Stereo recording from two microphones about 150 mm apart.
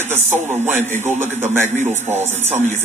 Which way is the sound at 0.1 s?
15° right (ahead or behind).